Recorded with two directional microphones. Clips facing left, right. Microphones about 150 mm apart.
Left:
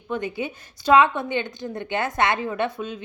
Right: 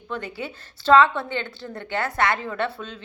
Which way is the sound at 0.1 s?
20° left (ahead or behind).